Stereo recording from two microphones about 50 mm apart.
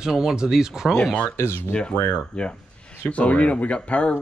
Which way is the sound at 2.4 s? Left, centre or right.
Left.